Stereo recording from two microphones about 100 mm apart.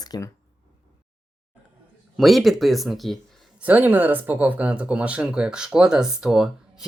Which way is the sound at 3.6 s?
15° right (ahead or behind).